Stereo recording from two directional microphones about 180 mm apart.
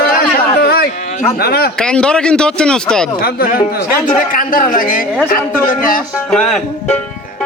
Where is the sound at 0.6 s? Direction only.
60° left (ahead or behind).